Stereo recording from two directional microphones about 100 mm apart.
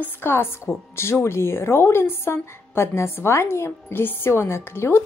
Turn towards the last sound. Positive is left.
turn(degrees=25)  # may be behind; listen again after turning